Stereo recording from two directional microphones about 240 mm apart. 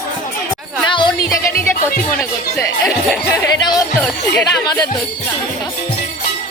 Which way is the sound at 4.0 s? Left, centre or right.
Centre.